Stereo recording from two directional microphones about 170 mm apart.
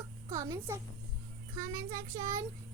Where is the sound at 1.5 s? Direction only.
20° right (ahead or behind).